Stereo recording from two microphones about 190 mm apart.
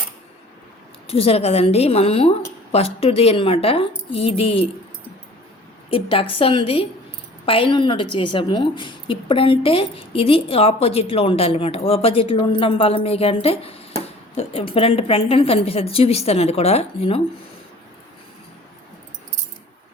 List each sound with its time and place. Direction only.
1.0 s a woman's voice: 30° left (ahead or behind)
5.9 s a woman's voice: 30° left (ahead or behind)